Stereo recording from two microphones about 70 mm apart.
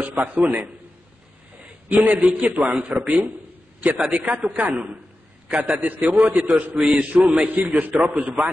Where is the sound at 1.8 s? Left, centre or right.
Right.